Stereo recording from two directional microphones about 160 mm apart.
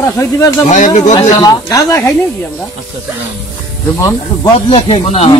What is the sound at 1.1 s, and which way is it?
Speech, 25° left (ahead or behind).